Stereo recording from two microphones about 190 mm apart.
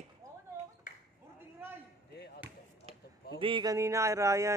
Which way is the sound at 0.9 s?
45° left (ahead or behind).